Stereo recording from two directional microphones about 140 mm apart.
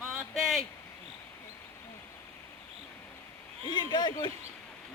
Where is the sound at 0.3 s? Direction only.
Centre (ahead or behind).